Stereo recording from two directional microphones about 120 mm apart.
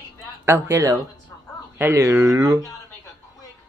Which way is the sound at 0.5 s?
20° right (ahead or behind).